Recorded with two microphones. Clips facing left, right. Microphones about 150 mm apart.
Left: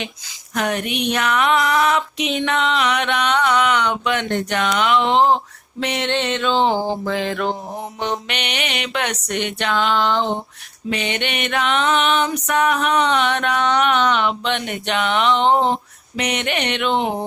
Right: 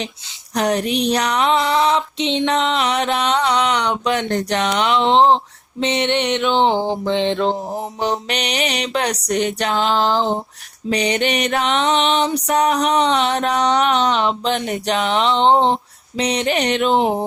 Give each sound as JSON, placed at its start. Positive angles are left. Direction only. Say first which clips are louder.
{"t": 0.5, "sound": "speech", "louder": "right 4 dB", "side_deg": -35}